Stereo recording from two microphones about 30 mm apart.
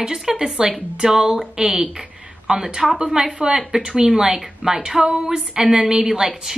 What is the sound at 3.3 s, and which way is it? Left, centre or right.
A woman's voice, right.